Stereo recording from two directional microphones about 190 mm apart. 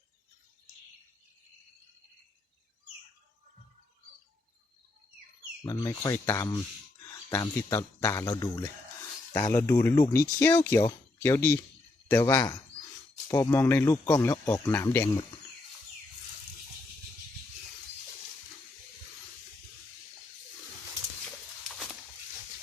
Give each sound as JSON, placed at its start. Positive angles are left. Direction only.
{"t": 5.6, "sound": "speech", "side_deg": 20}